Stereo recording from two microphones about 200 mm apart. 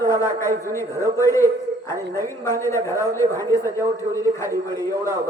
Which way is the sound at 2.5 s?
15° right (ahead or behind).